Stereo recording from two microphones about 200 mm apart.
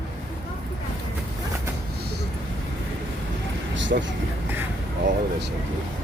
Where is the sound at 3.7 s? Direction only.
65° right (ahead or behind).